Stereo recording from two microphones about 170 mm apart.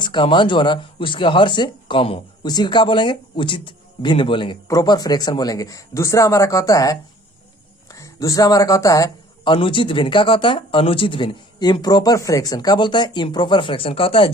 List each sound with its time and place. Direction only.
0.0 s speech: 30° left (ahead or behind)